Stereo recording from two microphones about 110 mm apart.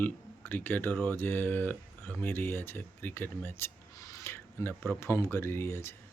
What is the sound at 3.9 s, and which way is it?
Speech, 30° left (ahead or behind).